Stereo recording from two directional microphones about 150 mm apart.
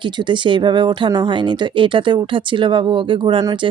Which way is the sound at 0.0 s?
30° right (ahead or behind).